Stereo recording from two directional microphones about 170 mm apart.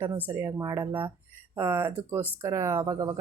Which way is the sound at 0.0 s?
15° right (ahead or behind).